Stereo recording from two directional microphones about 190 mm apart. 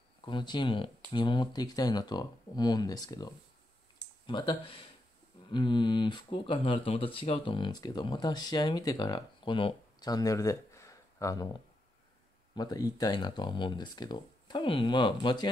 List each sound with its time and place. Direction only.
0.2 s speech: 25° left (ahead or behind)
12.5 s speech: 20° left (ahead or behind)